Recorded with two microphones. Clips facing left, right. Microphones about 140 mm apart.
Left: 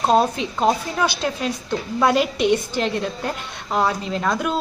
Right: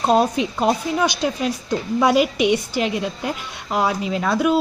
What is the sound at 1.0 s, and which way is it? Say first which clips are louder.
A woman's voice: even; 15° right (ahead or behind).